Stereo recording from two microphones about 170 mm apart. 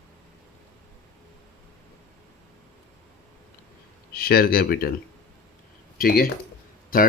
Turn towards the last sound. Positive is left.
turn(degrees=55)  # may be behind; listen again after turning